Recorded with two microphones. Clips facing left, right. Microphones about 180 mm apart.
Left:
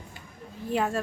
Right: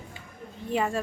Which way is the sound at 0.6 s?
Centre (ahead or behind).